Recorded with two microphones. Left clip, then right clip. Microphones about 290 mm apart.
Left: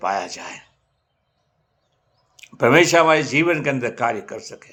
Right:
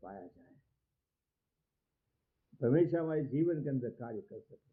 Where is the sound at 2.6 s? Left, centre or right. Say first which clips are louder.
Left 18 dB; left.